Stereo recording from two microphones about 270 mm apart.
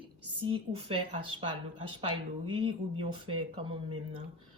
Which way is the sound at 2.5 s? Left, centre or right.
Centre.